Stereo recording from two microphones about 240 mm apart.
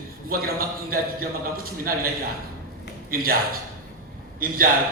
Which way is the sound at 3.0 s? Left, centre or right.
Right.